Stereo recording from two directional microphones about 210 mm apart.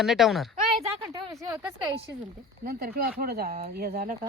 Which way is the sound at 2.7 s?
45° right (ahead or behind).